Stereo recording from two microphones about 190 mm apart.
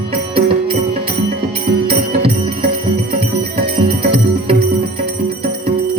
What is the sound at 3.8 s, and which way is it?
Music, 30° right (ahead or behind).